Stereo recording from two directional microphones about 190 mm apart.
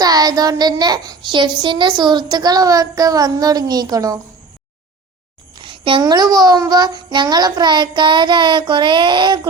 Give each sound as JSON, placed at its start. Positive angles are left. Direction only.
{"t": 0.0, "sound": "a child's voice", "side_deg": -20}
{"t": 5.5, "sound": "a child's voice", "side_deg": -25}